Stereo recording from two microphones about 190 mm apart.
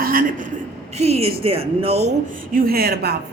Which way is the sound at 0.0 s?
50° right (ahead or behind).